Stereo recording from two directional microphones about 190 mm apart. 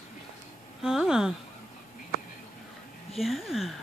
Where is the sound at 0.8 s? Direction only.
5° right (ahead or behind).